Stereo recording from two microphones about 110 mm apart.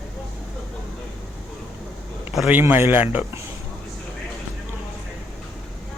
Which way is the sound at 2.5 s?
15° right (ahead or behind).